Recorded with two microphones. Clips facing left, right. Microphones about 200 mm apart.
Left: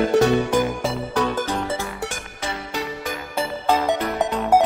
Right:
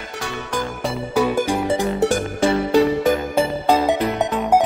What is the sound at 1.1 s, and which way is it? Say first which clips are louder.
Music: right 7 dB; 10° right (ahead or behind).